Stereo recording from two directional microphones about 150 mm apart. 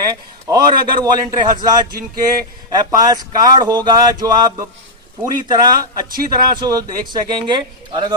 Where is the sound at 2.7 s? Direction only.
25° right (ahead or behind).